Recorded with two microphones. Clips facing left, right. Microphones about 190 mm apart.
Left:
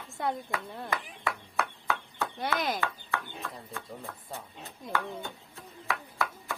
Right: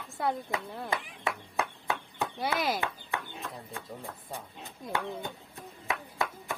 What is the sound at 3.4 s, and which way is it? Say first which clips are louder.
Chopping: even; 15° right (ahead or behind).